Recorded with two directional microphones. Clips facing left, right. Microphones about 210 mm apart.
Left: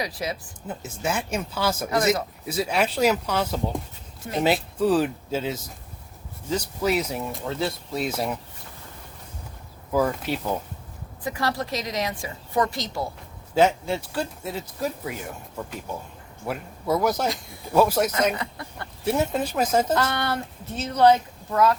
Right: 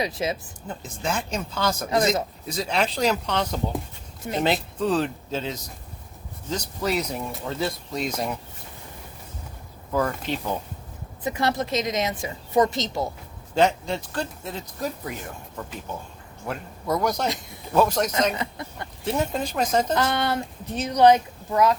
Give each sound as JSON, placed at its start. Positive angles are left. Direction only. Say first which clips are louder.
{"t": 0.0, "sound": "a woman's voice", "louder": "right 3 dB", "side_deg": -25}
{"t": 0.7, "sound": "speech", "louder": "left 1 dB", "side_deg": 5}
{"t": 9.9, "sound": "speech", "louder": "left 2 dB", "side_deg": 10}
{"t": 11.2, "sound": "a woman's voice", "louder": "right 2 dB", "side_deg": -20}
{"t": 13.5, "sound": "speech", "louder": "left 1 dB", "side_deg": 5}
{"t": 16.5, "sound": "speech", "louder": "left 2 dB", "side_deg": 5}
{"t": 18.3, "sound": "a woman's voice", "louder": "right 2 dB", "side_deg": -20}
{"t": 19.0, "sound": "speech", "louder": "left 2 dB", "side_deg": 10}
{"t": 19.9, "sound": "speech", "louder": "right 1 dB", "side_deg": -20}